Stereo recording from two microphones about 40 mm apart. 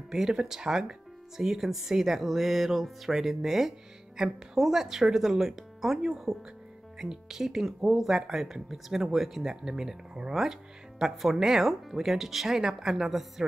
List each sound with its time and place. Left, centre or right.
0.1 s speech: centre